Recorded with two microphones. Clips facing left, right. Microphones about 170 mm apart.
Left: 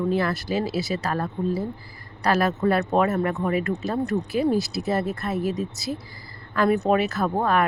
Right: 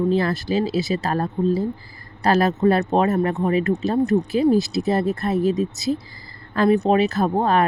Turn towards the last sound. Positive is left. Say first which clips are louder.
# right 3 dB
turn(degrees=-30)  # may be behind; listen again after turning